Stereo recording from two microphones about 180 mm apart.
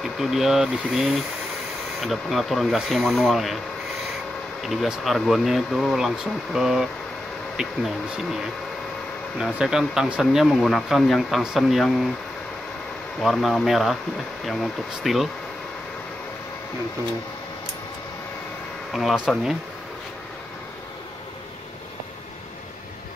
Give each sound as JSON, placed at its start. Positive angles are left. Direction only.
{"t": 0.0, "sound": "speech", "side_deg": 0}
{"t": 4.6, "sound": "speech", "side_deg": -5}
{"t": 9.4, "sound": "speech", "side_deg": -5}
{"t": 13.2, "sound": "speech", "side_deg": 0}
{"t": 18.9, "sound": "speech", "side_deg": 0}